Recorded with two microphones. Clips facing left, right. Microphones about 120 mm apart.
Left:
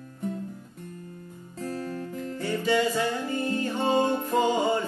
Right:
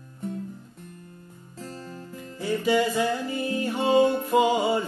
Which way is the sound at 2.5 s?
10° right (ahead or behind).